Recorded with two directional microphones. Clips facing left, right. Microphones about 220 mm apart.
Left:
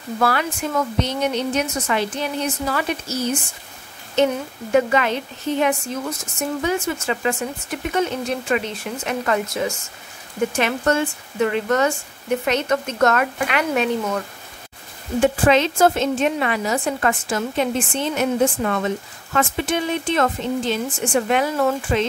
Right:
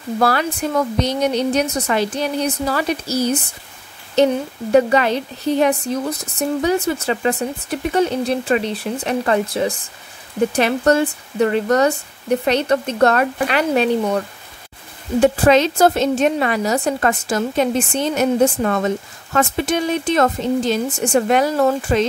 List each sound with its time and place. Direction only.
0.2 s speech: 35° right (ahead or behind)